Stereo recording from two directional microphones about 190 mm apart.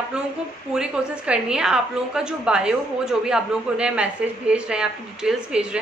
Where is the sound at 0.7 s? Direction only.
5° right (ahead or behind).